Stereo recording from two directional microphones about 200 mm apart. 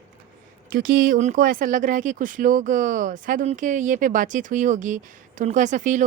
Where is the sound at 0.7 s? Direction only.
45° right (ahead or behind).